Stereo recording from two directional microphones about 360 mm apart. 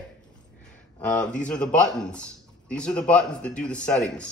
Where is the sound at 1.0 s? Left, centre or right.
Centre.